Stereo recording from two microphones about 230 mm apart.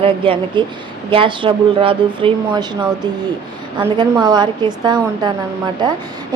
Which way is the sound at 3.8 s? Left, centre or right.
Centre.